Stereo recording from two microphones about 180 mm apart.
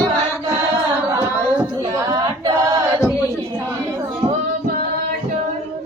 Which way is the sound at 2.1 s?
20° right (ahead or behind).